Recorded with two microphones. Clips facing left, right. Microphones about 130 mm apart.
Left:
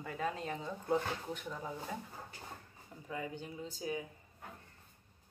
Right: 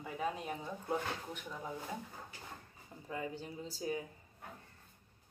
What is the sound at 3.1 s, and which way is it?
Speech, 35° right (ahead or behind).